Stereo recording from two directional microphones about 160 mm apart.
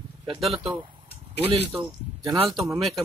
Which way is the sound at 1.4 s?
35° right (ahead or behind).